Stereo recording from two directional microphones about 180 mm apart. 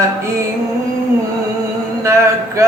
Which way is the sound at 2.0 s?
15° right (ahead or behind).